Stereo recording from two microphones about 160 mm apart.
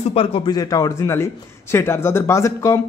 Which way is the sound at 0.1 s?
35° left (ahead or behind).